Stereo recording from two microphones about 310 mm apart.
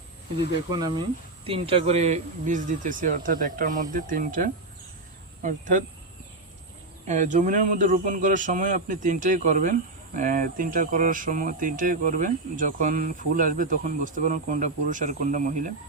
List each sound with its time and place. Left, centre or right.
0.7 s speech: centre
7.1 s speech: right